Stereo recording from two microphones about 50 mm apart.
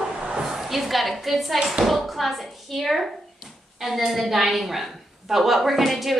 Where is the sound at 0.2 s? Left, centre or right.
Centre.